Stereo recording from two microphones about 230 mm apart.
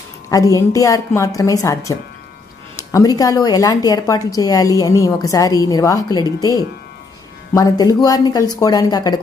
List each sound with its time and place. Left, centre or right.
0.3 s a woman's voice: centre
7.5 s a woman's voice: centre